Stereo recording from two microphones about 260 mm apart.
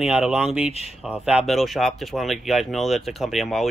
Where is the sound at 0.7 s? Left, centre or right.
Left.